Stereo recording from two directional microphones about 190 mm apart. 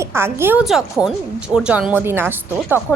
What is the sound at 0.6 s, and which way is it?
Speech, centre (ahead or behind).